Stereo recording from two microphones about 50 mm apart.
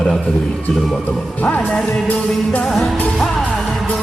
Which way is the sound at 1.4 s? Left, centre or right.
Left.